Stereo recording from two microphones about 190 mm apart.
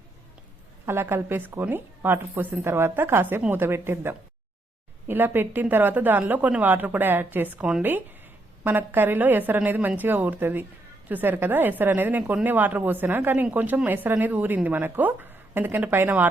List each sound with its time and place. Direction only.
0.9 s speech: 10° right (ahead or behind)